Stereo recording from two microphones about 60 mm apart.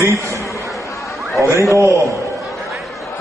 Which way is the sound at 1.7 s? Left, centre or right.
Right.